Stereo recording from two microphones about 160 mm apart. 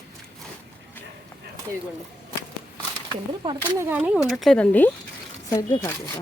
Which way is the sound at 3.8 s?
10° right (ahead or behind).